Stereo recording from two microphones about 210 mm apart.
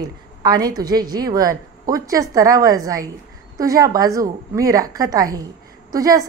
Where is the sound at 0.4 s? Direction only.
20° right (ahead or behind).